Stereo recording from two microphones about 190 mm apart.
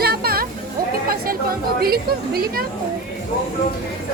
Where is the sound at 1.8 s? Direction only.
55° right (ahead or behind).